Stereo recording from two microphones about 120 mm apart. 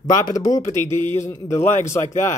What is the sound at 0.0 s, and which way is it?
A man's voice, 30° left (ahead or behind).